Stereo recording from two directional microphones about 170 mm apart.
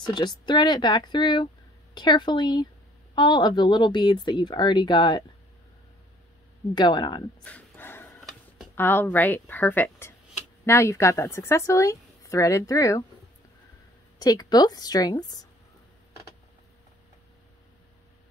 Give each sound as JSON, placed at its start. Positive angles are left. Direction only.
{"t": 0.0, "sound": "speech", "side_deg": 25}
{"t": 6.7, "sound": "speech", "side_deg": 25}
{"t": 7.4, "sound": "dog", "side_deg": 10}
{"t": 8.7, "sound": "a woman's voice", "side_deg": 10}
{"t": 14.1, "sound": "speech", "side_deg": 25}